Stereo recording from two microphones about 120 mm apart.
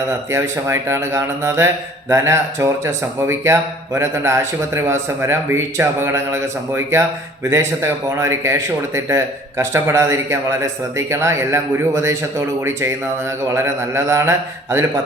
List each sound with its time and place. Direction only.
0.3 s speech: 25° right (ahead or behind)